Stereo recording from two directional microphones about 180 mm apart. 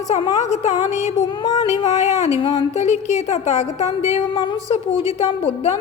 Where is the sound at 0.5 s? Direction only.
40° left (ahead or behind).